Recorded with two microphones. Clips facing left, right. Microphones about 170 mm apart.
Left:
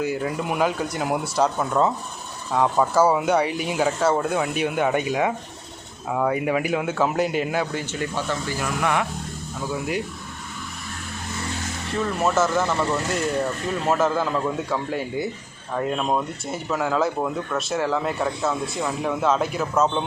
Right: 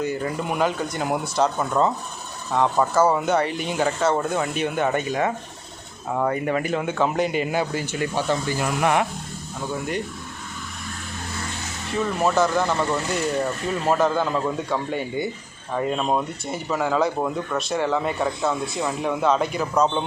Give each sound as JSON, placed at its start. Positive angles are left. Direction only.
{"t": 0.0, "sound": "speech", "side_deg": 5}
{"t": 2.9, "sound": "speech", "side_deg": 10}
{"t": 8.1, "sound": "speech", "side_deg": -20}
{"t": 9.6, "sound": "speech", "side_deg": 0}
{"t": 11.9, "sound": "speech", "side_deg": 0}